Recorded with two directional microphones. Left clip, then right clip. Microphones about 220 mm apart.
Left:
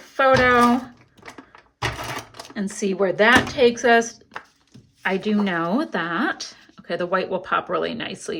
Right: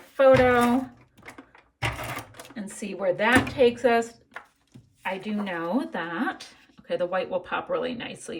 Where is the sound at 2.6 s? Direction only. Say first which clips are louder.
Left 10 dB; 20° left (ahead or behind).